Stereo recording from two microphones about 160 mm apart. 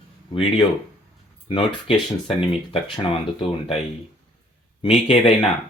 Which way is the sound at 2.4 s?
35° left (ahead or behind).